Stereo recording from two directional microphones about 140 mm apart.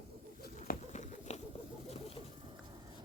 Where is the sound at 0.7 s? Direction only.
55° left (ahead or behind).